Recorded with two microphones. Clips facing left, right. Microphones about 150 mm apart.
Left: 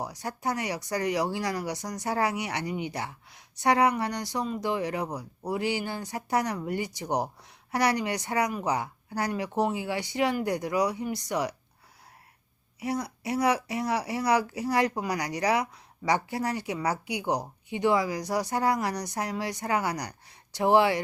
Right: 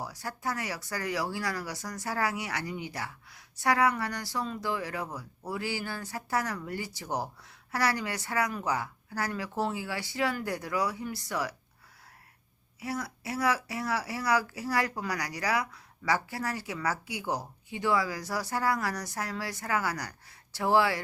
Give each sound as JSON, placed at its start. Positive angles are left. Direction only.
{"t": 0.0, "sound": "speech", "side_deg": 20}
{"t": 12.8, "sound": "speech", "side_deg": 20}